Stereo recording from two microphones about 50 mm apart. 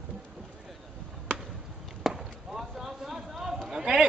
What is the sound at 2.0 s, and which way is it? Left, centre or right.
Chop, centre.